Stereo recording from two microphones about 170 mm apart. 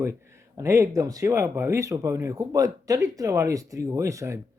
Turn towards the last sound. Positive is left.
turn(degrees=-15)  # may be behind; listen again after turning